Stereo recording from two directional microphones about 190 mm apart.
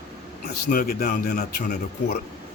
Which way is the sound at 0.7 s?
50° left (ahead or behind).